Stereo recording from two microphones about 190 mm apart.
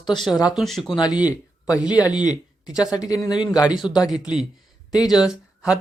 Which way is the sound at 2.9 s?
20° left (ahead or behind).